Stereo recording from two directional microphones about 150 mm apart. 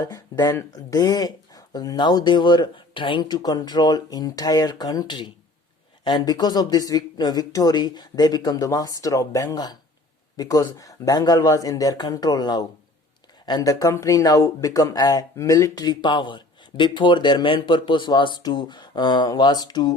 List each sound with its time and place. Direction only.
0.0 s speech: 25° left (ahead or behind)